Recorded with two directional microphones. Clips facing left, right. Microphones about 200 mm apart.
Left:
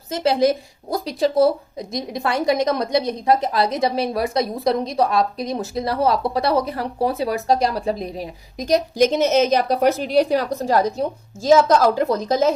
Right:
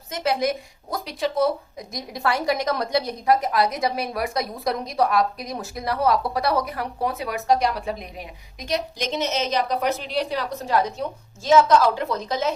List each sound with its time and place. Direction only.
0.1 s a woman's voice: 30° left (ahead or behind)